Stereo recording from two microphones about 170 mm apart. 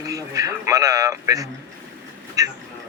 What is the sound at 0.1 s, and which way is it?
Speech, 20° right (ahead or behind).